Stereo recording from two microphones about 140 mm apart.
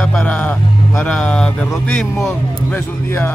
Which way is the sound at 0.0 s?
5° left (ahead or behind).